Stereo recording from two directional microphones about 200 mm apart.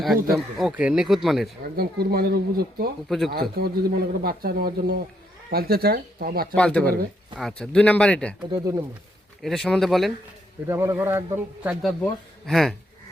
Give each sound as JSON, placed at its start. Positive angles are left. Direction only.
{"t": 0.3, "sound": "a man's voice", "side_deg": -5}
{"t": 1.7, "sound": "speech", "side_deg": -50}
{"t": 3.1, "sound": "a man's voice", "side_deg": 0}
{"t": 3.5, "sound": "speech", "side_deg": -50}
{"t": 6.6, "sound": "a man's voice", "side_deg": 5}
{"t": 8.4, "sound": "speech", "side_deg": -20}
{"t": 9.4, "sound": "a man's voice", "side_deg": 0}
{"t": 10.7, "sound": "a man's voice", "side_deg": -15}